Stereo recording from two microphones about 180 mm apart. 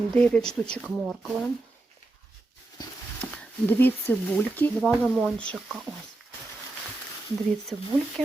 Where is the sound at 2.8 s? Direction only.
20° left (ahead or behind).